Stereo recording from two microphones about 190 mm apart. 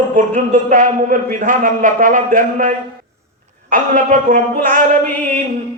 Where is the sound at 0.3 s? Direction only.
45° right (ahead or behind).